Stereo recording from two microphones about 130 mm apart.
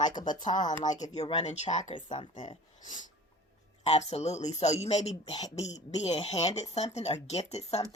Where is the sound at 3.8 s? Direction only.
55° left (ahead or behind).